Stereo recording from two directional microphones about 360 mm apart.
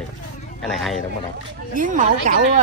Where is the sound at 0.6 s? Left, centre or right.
Centre.